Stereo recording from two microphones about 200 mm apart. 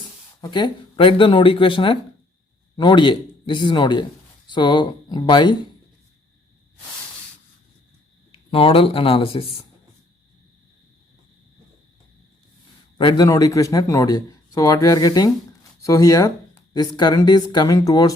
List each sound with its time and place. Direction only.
0.4 s speech: 20° left (ahead or behind)
8.3 s speech: 25° left (ahead or behind)
13.0 s speech: 20° left (ahead or behind)